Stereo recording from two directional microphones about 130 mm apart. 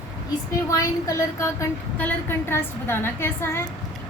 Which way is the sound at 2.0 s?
15° left (ahead or behind).